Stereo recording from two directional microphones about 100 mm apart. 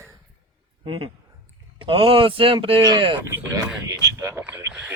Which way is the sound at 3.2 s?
25° right (ahead or behind).